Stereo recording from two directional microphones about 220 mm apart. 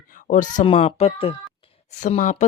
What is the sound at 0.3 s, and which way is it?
Speech, 35° left (ahead or behind).